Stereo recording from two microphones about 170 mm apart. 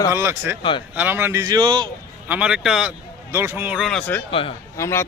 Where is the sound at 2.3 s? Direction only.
5° right (ahead or behind).